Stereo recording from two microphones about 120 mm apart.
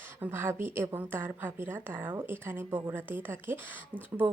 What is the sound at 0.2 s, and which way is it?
A woman's voice, 20° right (ahead or behind).